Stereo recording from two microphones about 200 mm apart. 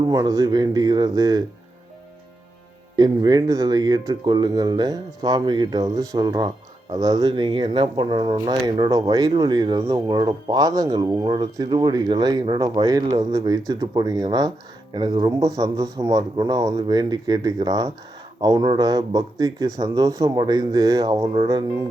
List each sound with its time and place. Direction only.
0.0 s speech: 20° right (ahead or behind)
2.9 s speech: 20° right (ahead or behind)